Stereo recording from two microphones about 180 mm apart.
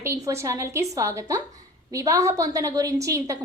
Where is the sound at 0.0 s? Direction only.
15° right (ahead or behind).